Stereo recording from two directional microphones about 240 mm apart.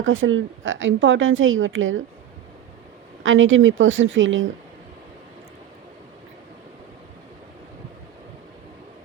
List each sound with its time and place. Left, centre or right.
0.0 s a woman's voice: right
3.2 s a woman's voice: right